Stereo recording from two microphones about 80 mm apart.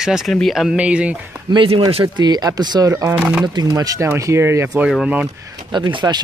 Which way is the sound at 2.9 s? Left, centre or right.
Right.